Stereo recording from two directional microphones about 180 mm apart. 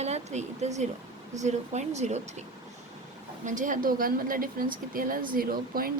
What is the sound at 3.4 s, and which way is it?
A woman's voice, 45° right (ahead or behind).